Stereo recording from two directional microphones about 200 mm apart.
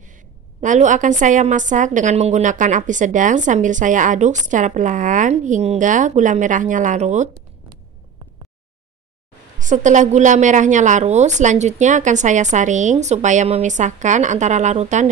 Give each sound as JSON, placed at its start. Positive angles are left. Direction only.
{"t": 0.6, "sound": "a woman's voice", "side_deg": -40}
{"t": 9.6, "sound": "a woman's voice", "side_deg": -40}